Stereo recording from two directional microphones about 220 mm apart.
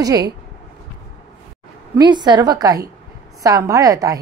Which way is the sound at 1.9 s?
20° right (ahead or behind).